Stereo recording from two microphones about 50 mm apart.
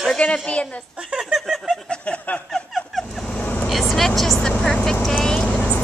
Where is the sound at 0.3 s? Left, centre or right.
Left.